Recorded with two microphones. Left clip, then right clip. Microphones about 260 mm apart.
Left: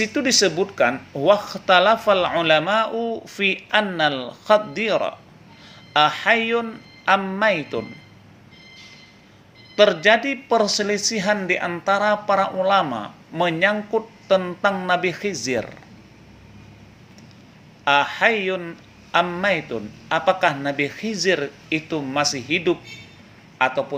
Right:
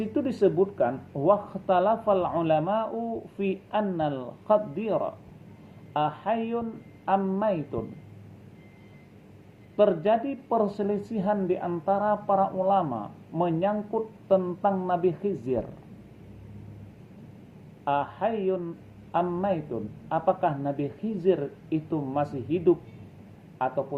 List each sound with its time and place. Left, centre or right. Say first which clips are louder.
0.0 s speech: left 6 dB; left
9.7 s speech: left 7 dB; left
17.8 s a man's voice: left 10 dB; left